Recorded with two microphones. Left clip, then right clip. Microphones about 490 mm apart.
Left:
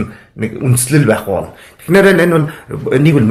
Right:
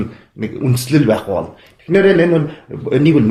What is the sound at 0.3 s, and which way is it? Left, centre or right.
Speech, centre.